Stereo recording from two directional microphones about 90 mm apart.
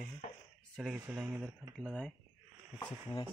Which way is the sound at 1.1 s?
15° right (ahead or behind).